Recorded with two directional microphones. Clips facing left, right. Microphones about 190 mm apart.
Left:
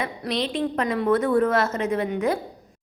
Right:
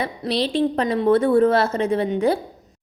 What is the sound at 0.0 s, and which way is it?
A woman's voice, 35° right (ahead or behind).